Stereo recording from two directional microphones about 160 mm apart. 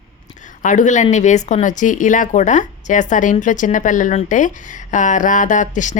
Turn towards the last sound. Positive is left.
turn(degrees=50)  # may be behind; listen again after turning